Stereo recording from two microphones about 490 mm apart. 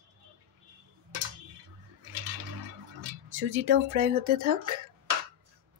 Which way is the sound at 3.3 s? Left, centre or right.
Right.